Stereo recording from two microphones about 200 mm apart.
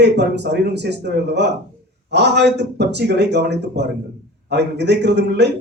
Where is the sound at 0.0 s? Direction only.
60° right (ahead or behind).